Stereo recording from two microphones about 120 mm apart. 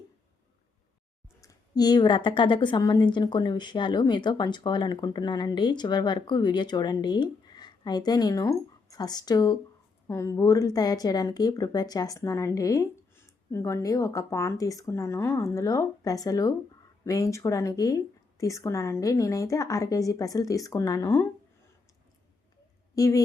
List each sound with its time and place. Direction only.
1.4 s a woman's voice: 30° left (ahead or behind)
23.0 s speech: 30° left (ahead or behind)